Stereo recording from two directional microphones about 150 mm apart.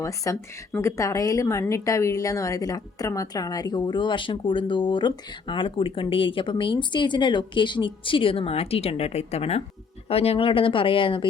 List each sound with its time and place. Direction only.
0.0 s a woman's voice: 20° left (ahead or behind)